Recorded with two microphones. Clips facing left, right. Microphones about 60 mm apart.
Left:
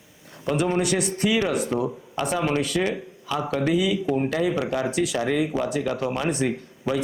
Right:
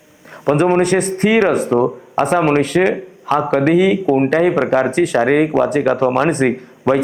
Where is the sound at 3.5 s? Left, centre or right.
Right.